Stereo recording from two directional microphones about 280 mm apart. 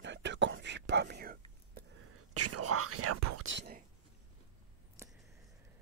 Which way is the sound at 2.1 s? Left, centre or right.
Right.